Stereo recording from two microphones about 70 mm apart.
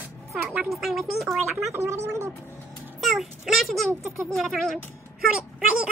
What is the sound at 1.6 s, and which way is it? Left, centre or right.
Speech, right.